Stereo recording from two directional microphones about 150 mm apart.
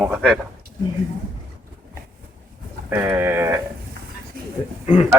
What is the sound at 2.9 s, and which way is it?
Speech, 15° right (ahead or behind).